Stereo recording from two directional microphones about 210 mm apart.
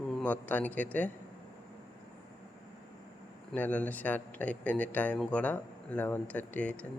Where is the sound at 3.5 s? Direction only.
10° left (ahead or behind).